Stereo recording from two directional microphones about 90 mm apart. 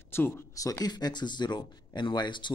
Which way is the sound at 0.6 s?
40° left (ahead or behind).